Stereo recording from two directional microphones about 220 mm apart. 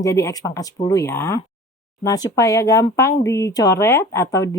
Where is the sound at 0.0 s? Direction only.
15° left (ahead or behind).